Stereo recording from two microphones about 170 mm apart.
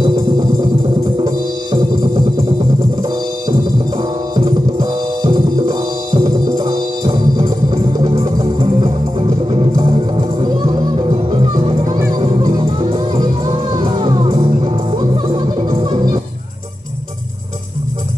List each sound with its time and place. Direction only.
4.5 s music: 25° right (ahead or behind)